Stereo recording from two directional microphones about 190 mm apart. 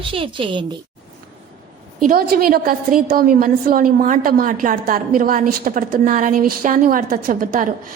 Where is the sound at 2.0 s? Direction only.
50° right (ahead or behind).